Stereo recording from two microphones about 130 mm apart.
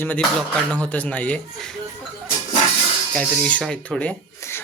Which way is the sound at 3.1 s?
10° left (ahead or behind).